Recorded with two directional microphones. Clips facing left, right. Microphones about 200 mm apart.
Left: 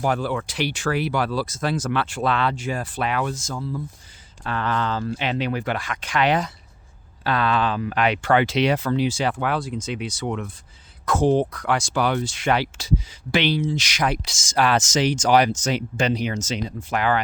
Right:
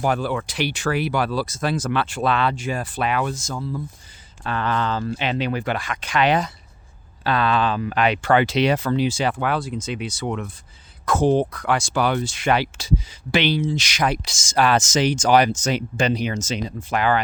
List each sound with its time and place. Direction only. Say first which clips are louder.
0.0 s speech: right 1 dB; 15° right (ahead or behind); by 9.1 s 35° right (ahead or behind)
9.4 s speech: right 1 dB; centre (ahead or behind); by 14.2 s 25° right (ahead or behind)
14.3 s speech: right 2 dB; 45° right (ahead or behind)
16.9 s speech: right 2 dB; 30° right (ahead or behind)